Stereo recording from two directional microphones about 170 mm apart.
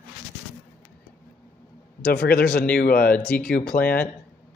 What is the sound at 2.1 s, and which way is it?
A man's voice, 65° left (ahead or behind).